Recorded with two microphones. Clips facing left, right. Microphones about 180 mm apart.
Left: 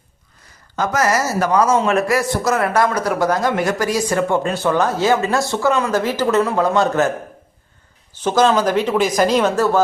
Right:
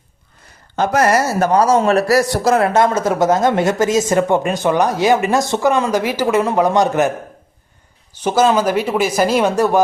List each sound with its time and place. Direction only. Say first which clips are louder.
0.9 s speech: right 3 dB; 60° right (ahead or behind)
1.3 s a man's voice: right 2 dB; 30° right (ahead or behind)
8.1 s speech: right 1 dB; 10° right (ahead or behind)